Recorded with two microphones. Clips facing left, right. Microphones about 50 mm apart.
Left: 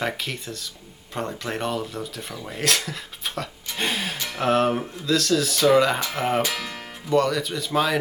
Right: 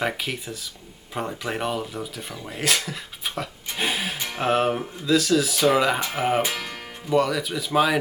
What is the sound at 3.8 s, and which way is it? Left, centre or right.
Music, centre.